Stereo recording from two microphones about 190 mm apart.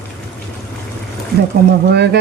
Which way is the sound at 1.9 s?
60° right (ahead or behind).